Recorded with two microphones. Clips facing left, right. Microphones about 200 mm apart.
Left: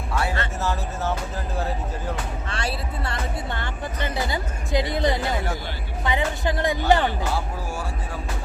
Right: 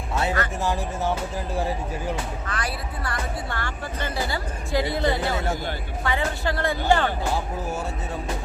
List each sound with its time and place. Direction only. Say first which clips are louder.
0.1 s music: right 2 dB; 20° right (ahead or behind)
2.5 s music: left 1 dB; 25° left (ahead or behind)